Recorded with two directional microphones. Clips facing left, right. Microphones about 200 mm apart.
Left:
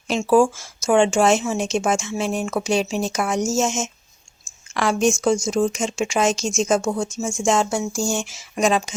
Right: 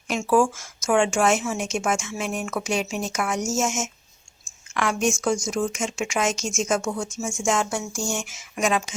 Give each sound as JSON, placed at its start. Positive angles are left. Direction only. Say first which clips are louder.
{"t": 0.1, "sound": "a woman's voice", "louder": "left 4 dB", "side_deg": 25}